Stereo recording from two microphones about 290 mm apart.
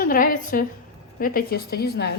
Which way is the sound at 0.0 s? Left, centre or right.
Left.